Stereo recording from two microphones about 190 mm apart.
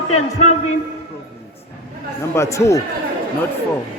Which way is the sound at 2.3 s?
15° left (ahead or behind).